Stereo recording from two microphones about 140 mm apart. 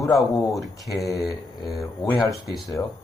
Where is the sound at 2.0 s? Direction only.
25° left (ahead or behind).